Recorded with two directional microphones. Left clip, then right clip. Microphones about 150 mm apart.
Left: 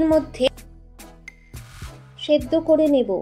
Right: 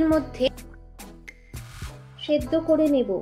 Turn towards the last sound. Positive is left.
turn(degrees=30)  # may be behind; listen again after turning